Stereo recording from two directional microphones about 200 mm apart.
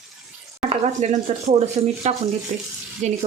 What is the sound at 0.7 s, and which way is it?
Speech, 35° right (ahead or behind).